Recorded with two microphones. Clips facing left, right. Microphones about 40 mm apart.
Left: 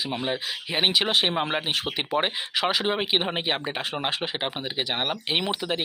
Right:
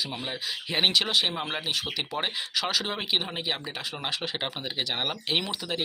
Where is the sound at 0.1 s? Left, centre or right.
Left.